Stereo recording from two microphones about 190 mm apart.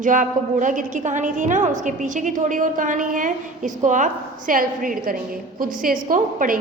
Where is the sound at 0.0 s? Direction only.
45° right (ahead or behind).